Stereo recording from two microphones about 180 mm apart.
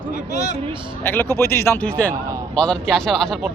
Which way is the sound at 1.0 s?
10° left (ahead or behind).